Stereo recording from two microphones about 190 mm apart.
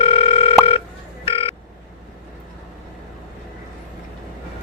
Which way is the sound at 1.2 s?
30° left (ahead or behind).